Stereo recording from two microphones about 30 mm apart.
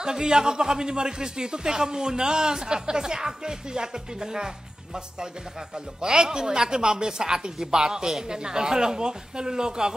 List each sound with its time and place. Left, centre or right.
0.0 s speech: right
5.9 s speech: right